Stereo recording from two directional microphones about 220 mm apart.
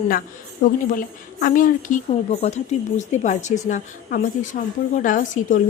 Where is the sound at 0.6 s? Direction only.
40° left (ahead or behind).